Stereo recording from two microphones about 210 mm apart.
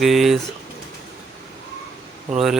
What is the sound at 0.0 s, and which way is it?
Speech, centre (ahead or behind).